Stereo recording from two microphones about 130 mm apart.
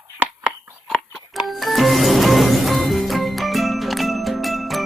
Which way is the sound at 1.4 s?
Centre (ahead or behind).